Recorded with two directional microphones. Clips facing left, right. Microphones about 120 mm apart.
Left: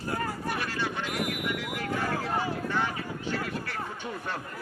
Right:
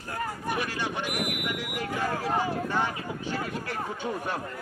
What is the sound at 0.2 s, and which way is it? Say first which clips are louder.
Vehicle: right 1 dB; 15° right (ahead or behind).